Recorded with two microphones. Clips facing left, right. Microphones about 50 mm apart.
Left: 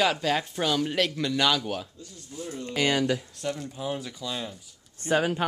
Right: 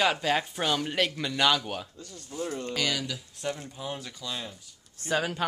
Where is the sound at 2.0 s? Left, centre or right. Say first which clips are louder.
Right 4 dB; right.